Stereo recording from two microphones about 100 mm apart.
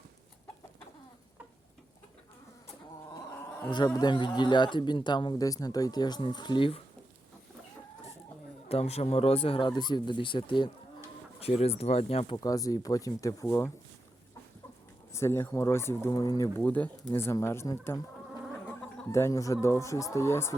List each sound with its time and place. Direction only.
3.3 s bee: 25° left (ahead or behind)
3.7 s speech: 45° left (ahead or behind); by 6.8 s 60° left (ahead or behind)
8.7 s speech: 90° left; by 9.6 s 70° left (ahead or behind)
9.6 s speech: 50° left (ahead or behind)
11.3 s speech: 90° left
12.4 s speech: 35° left (ahead or behind)
15.1 s speech: 25° left (ahead or behind)
16.6 s speech: 15° left (ahead or behind)
17.4 s speech: 25° left (ahead or behind)
18.6 s insect: 5° left (ahead or behind)
19.1 s speech: 30° left (ahead or behind)